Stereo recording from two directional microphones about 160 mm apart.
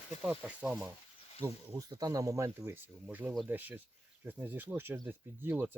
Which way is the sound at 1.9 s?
25° right (ahead or behind).